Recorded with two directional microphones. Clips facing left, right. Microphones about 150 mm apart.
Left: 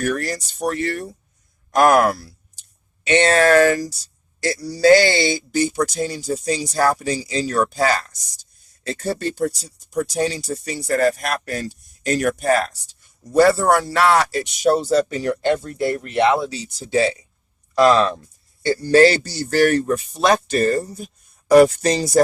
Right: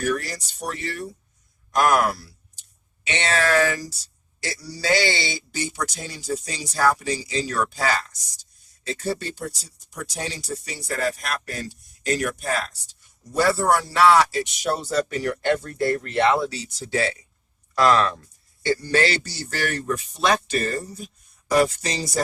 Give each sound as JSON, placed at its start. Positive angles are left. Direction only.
{"t": 0.0, "sound": "speech", "side_deg": 55}
{"t": 18.7, "sound": "speech", "side_deg": 35}